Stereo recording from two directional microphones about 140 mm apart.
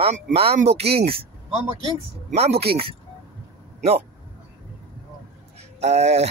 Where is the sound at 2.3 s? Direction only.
45° right (ahead or behind).